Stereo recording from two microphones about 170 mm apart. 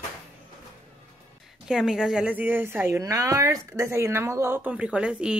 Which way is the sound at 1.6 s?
5° right (ahead or behind).